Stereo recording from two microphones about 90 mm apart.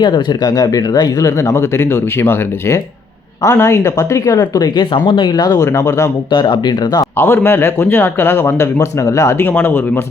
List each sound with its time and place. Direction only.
0.0 s speech: 50° left (ahead or behind)
5.6 s speech: 35° left (ahead or behind)
6.3 s speech: 55° left (ahead or behind)
7.2 s a man's voice: 25° left (ahead or behind)
9.5 s a man's voice: 20° left (ahead or behind)